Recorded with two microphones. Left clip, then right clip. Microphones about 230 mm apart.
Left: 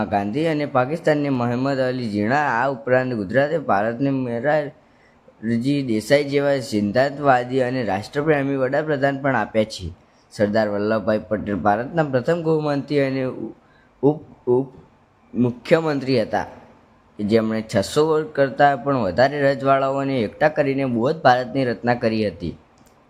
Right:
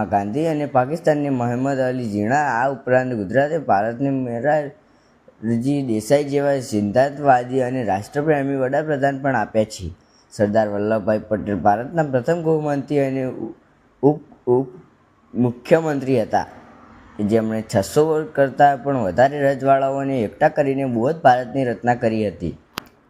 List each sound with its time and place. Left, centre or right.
0.0 s speech: centre
5.7 s speech: centre